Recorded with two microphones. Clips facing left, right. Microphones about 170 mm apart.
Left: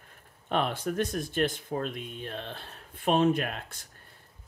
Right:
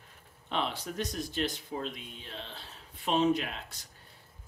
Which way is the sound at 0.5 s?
50° left (ahead or behind).